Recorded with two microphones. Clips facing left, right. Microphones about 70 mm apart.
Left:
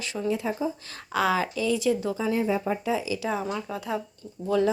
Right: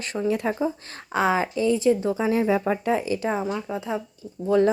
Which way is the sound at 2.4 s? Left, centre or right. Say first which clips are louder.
Right 4 dB; right.